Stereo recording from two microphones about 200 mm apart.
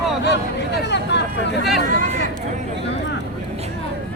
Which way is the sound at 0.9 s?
60° left (ahead or behind).